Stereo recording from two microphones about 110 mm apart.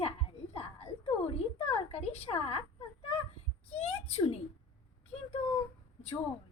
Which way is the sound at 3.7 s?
70° left (ahead or behind).